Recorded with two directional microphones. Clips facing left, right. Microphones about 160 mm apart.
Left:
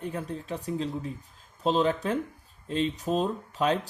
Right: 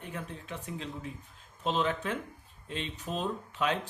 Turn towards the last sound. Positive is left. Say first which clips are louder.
# left 5 dB
turn(degrees=35)  # may be behind; listen again after turning